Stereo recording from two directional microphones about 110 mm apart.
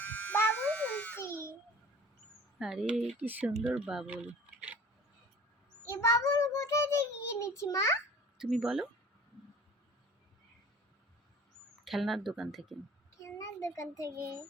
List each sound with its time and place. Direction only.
0.0 s music: 15° left (ahead or behind)
1.2 s babbling: 20° left (ahead or behind)
2.6 s speech: 5° right (ahead or behind)
5.9 s child singing: 25° left (ahead or behind)
8.4 s speech: centre (ahead or behind)
11.9 s speech: centre (ahead or behind)
13.1 s a sound: 30° left (ahead or behind)
13.9 s child singing: 30° left (ahead or behind)